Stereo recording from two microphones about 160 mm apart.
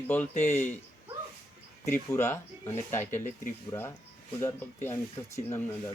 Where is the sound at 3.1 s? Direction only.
55° left (ahead or behind).